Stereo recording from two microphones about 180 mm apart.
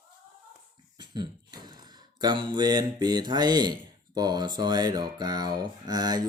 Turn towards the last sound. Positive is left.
turn(degrees=-20)  # may be behind; listen again after turning